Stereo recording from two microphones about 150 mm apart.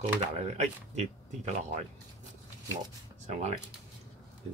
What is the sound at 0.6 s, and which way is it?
Speech, 50° right (ahead or behind).